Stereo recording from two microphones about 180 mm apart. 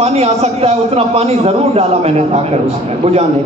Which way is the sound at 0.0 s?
35° right (ahead or behind).